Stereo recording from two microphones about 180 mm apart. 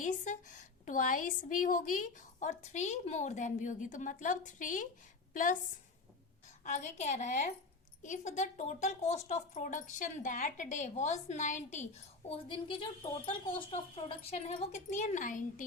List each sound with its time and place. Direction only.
0.0 s a woman's voice: 45° left (ahead or behind)
6.7 s a woman's voice: 40° left (ahead or behind)
12.3 s a woman's voice: 30° left (ahead or behind); by 15.6 s 45° left (ahead or behind)